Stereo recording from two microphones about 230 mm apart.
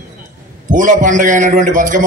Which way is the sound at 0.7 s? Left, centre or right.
Right.